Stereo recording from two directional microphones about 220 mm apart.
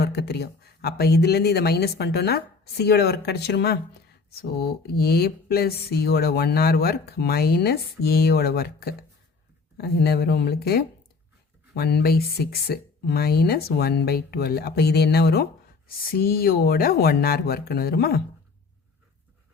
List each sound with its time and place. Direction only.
0.0 s speech: 45° left (ahead or behind)